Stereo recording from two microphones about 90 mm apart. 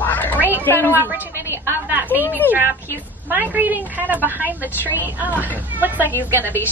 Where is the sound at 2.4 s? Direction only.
20° left (ahead or behind).